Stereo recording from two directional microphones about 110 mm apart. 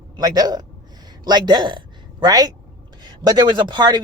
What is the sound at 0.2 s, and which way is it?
Speech, 35° right (ahead or behind).